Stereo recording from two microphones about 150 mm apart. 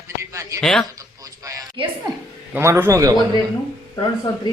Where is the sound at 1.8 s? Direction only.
35° right (ahead or behind).